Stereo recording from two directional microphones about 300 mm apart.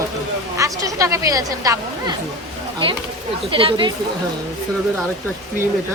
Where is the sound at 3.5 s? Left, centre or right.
Centre.